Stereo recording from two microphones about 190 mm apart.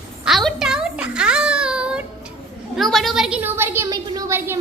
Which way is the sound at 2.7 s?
Centre (ahead or behind).